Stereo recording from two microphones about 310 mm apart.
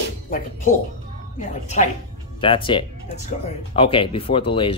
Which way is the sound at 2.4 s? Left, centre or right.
Centre.